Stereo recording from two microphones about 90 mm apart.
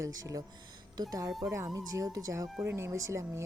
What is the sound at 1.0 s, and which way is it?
Speech, 45° right (ahead or behind).